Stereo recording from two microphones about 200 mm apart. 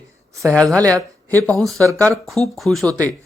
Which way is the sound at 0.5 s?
5° left (ahead or behind).